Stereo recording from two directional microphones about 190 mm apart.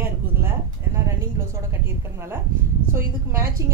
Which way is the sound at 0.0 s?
10° right (ahead or behind).